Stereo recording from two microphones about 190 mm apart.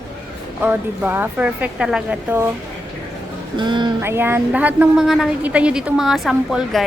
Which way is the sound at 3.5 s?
25° right (ahead or behind).